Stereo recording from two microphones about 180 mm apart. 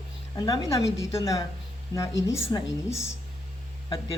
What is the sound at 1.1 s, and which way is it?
A woman's voice, 15° left (ahead or behind).